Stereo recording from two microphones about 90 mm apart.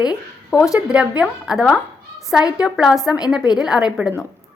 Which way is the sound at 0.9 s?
10° right (ahead or behind).